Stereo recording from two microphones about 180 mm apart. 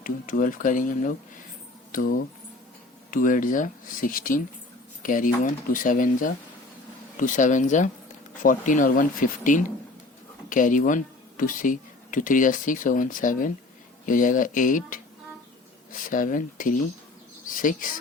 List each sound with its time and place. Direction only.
0.0 s speech: 50° left (ahead or behind)